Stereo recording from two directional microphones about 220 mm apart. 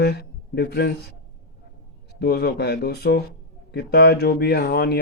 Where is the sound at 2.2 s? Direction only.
45° left (ahead or behind).